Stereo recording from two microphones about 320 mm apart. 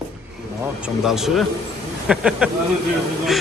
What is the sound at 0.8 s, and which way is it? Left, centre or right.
A man's voice, centre.